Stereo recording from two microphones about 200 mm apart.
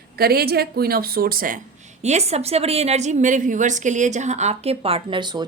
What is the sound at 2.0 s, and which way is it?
A woman's voice, 35° right (ahead or behind).